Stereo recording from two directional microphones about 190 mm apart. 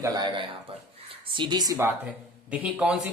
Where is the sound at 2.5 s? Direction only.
5° right (ahead or behind).